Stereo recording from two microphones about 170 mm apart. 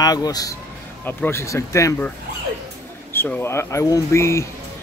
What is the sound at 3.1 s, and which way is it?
Speech, 15° left (ahead or behind).